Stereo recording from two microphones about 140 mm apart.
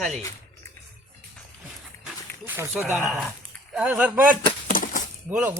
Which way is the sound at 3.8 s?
10° right (ahead or behind).